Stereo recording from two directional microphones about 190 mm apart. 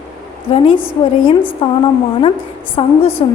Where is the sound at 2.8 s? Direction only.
30° left (ahead or behind).